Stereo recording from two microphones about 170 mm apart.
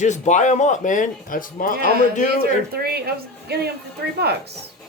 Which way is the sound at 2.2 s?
65° right (ahead or behind).